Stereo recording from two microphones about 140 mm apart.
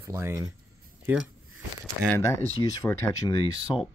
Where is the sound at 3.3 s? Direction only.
35° left (ahead or behind).